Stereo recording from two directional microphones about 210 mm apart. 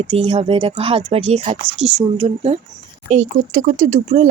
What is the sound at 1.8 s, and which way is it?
Speech, 5° right (ahead or behind).